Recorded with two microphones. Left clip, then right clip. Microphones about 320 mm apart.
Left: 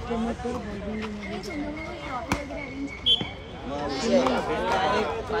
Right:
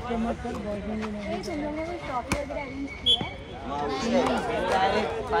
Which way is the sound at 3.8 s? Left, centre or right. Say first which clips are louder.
Left 3 dB; centre.